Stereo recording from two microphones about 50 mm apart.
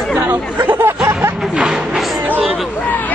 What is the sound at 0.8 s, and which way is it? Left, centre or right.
Snicker, right.